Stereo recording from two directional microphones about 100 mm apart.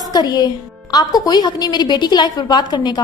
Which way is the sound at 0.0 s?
40° left (ahead or behind).